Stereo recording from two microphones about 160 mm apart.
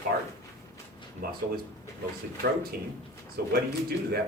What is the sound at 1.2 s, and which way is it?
Speech, 70° right (ahead or behind).